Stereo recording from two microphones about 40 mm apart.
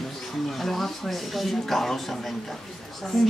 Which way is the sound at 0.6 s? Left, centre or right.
Centre.